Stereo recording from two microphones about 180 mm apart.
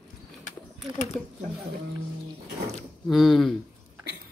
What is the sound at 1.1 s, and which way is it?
Speech, centre (ahead or behind).